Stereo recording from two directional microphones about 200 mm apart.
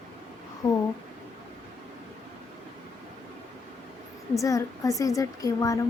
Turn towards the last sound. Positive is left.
turn(degrees=15)  # may be behind; listen again after turning